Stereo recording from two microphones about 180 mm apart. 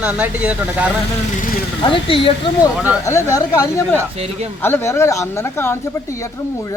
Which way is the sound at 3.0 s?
15° left (ahead or behind).